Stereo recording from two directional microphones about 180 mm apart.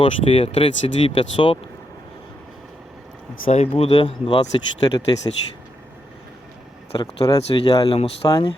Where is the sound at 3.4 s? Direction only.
40° left (ahead or behind).